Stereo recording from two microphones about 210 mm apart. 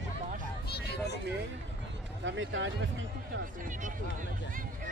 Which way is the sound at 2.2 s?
60° right (ahead or behind).